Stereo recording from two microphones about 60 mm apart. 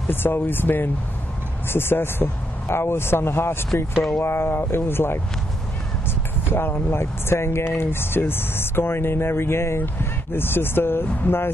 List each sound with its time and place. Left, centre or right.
0.1 s speech: left